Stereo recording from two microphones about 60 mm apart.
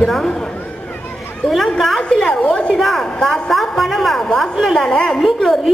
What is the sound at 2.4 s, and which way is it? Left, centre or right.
Speech, centre.